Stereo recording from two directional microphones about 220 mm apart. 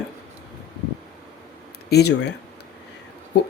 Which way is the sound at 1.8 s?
50° left (ahead or behind).